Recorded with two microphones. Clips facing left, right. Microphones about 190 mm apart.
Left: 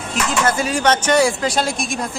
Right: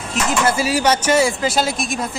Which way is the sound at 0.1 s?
5° right (ahead or behind).